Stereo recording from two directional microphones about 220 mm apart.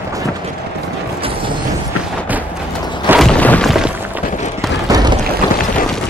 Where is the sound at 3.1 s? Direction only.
Centre (ahead or behind).